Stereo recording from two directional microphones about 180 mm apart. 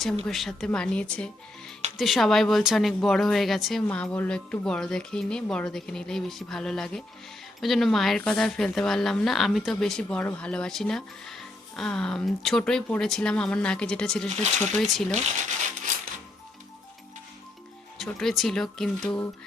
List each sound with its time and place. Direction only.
0.3 s speech: centre (ahead or behind)
15.1 s speech: 40° right (ahead or behind)
17.9 s speech: centre (ahead or behind)